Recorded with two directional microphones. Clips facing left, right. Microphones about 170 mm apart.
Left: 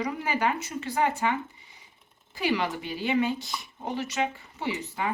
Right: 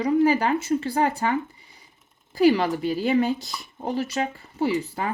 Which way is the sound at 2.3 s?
35° right (ahead or behind).